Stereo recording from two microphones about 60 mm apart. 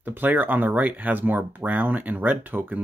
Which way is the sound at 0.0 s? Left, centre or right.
Right.